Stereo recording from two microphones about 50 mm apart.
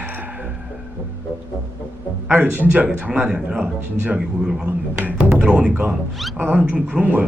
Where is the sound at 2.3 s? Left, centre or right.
Right.